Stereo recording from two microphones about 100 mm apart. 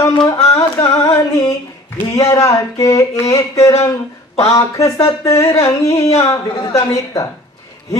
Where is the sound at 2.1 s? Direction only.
30° left (ahead or behind).